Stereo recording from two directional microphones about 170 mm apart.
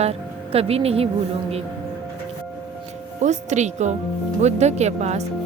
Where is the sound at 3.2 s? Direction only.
45° right (ahead or behind).